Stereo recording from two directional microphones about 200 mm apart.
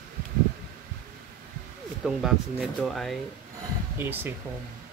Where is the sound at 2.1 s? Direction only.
Centre (ahead or behind).